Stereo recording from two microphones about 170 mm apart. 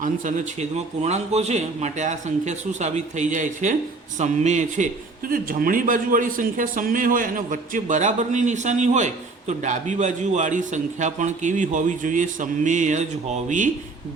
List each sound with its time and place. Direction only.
0.0 s a man's voice: 50° right (ahead or behind)
5.3 s a man's voice: 55° right (ahead or behind)